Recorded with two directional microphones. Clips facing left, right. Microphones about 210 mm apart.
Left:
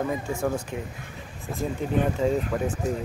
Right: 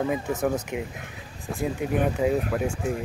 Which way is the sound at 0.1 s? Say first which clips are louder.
Right 2 dB; 20° right (ahead or behind).